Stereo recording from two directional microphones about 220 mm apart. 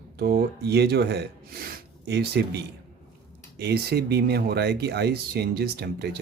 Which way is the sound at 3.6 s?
45° right (ahead or behind).